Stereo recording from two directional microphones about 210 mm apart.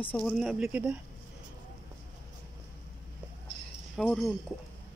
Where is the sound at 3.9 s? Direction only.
Centre (ahead or behind).